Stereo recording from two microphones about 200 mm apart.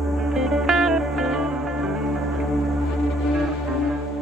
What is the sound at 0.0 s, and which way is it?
Music, centre (ahead or behind).